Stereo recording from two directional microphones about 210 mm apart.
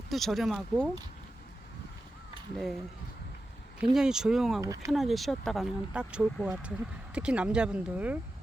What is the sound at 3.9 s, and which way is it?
Speech, 5° right (ahead or behind).